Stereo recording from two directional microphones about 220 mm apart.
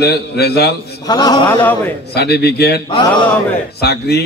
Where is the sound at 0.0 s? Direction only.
45° left (ahead or behind).